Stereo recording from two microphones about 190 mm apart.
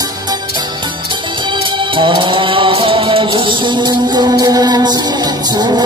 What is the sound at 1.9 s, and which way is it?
Music, 25° right (ahead or behind).